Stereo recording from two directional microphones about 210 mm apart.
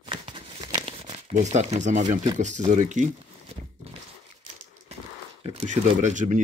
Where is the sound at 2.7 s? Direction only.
35° right (ahead or behind).